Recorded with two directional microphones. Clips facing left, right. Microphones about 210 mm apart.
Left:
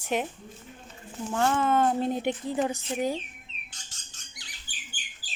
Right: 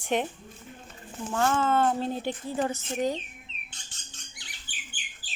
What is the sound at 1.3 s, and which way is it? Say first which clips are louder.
Speech: even; 15° left (ahead or behind).